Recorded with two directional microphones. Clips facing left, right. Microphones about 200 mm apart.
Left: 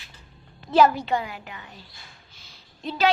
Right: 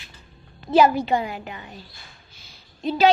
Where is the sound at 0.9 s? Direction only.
10° right (ahead or behind).